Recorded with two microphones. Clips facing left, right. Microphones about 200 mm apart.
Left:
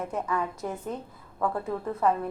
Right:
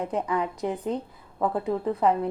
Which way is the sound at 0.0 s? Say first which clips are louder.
Right 3 dB; 15° right (ahead or behind).